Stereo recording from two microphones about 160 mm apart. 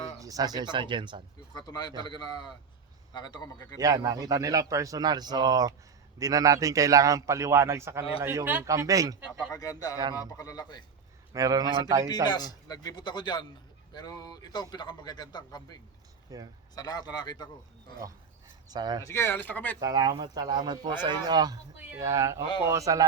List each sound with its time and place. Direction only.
0.2 s speech: 20° right (ahead or behind)
1.5 s a man's voice: 25° left (ahead or behind)
3.8 s speech: 20° right (ahead or behind)
9.5 s a man's voice: 20° left (ahead or behind)
11.3 s speech: 20° right (ahead or behind)
12.0 s a man's voice: 25° left (ahead or behind)
16.3 s speech: 20° right (ahead or behind)
16.7 s a man's voice: 25° left (ahead or behind)
18.7 s speech: 25° right (ahead or behind)
19.0 s speech: 15° left (ahead or behind)
19.8 s speech: 25° right (ahead or behind)